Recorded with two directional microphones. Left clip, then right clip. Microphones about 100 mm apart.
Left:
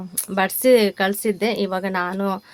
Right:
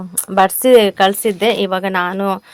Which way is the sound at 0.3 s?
30° right (ahead or behind).